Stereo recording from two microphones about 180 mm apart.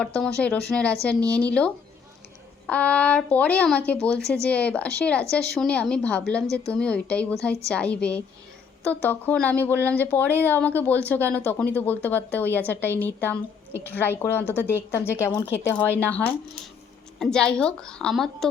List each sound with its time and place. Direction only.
0.0 s a woman's voice: 5° left (ahead or behind)
6.5 s speech: 15° right (ahead or behind)
6.7 s a woman's voice: 5° left (ahead or behind)